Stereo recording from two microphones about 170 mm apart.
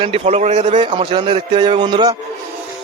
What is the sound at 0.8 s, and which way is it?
Speech, 25° right (ahead or behind).